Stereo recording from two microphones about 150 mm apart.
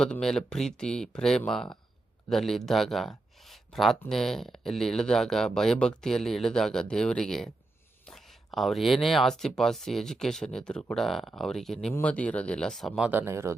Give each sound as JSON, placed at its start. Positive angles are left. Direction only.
{"t": 0.0, "sound": "speech", "side_deg": 5}
{"t": 13.1, "sound": "speech", "side_deg": -15}